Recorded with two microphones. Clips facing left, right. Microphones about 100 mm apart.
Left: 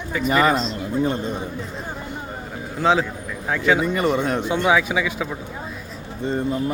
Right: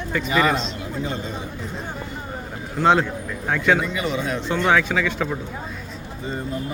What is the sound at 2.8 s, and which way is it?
Speech, centre (ahead or behind).